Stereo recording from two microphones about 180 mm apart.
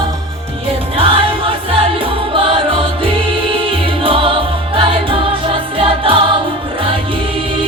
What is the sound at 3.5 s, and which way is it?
Music, 30° right (ahead or behind).